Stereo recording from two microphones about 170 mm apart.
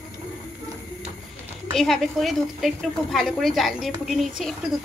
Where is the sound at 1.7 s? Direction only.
Centre (ahead or behind).